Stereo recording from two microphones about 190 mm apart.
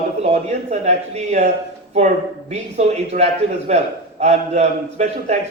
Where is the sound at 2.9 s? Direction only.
35° right (ahead or behind).